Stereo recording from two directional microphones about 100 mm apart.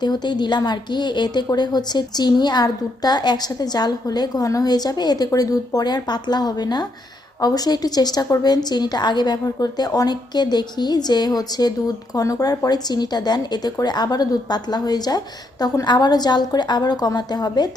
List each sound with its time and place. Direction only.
0.0 s a woman's voice: 45° left (ahead or behind)